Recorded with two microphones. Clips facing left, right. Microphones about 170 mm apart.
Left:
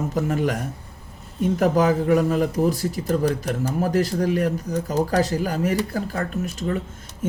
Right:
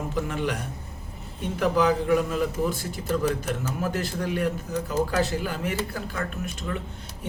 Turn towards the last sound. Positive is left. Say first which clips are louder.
# left 6 dB
turn(degrees=40)  # may be behind; listen again after turning